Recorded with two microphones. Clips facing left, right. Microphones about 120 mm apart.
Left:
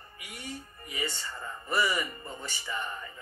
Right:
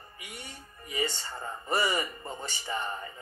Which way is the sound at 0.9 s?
35° right (ahead or behind).